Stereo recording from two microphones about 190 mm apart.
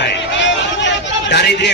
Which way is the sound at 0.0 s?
70° left (ahead or behind).